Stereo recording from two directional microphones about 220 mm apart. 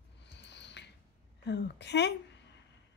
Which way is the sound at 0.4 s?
55° left (ahead or behind).